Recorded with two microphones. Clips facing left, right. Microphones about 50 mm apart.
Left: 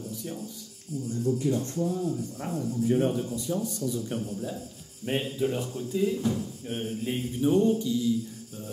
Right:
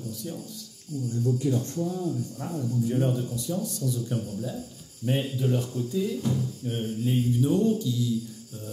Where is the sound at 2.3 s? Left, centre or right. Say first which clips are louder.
Even; left.